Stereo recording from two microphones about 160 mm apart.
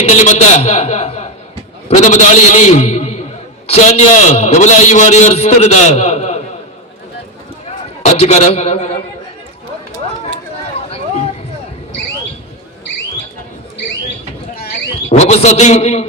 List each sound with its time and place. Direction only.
0.0 s a man's voice: 45° left (ahead or behind)
8.0 s a man's voice: 45° left (ahead or behind)
10.8 s a sound: 40° left (ahead or behind)
15.1 s a man's voice: 45° left (ahead or behind)